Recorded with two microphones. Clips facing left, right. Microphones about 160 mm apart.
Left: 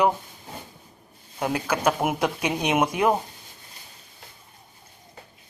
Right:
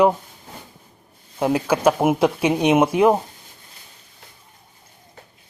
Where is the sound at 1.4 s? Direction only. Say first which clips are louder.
Right 6 dB; 5° right (ahead or behind).